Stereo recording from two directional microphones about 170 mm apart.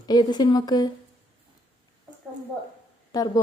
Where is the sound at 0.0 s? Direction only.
25° left (ahead or behind).